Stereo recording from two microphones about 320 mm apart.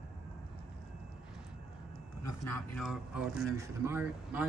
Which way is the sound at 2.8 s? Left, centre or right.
Centre.